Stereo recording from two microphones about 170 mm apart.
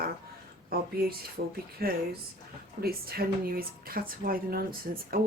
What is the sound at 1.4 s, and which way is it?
Speech, 70° right (ahead or behind).